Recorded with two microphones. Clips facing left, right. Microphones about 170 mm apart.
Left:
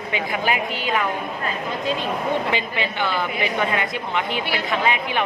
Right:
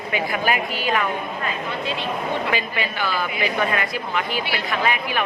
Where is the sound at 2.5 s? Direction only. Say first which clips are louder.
Even; 25° left (ahead or behind).